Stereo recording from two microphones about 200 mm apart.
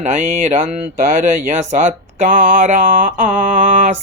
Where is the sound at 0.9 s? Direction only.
40° right (ahead or behind).